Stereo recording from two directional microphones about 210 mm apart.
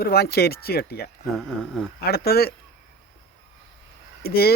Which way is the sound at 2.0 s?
50° left (ahead or behind).